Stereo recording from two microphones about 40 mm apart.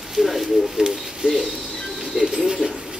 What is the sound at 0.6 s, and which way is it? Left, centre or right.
Speech, centre.